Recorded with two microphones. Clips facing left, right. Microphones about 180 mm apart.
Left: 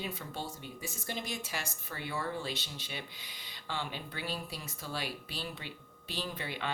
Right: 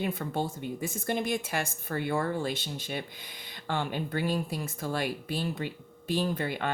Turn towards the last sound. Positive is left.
turn(degrees=-50)  # may be behind; listen again after turning